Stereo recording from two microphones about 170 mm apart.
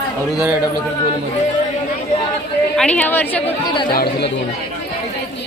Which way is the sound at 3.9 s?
65° left (ahead or behind).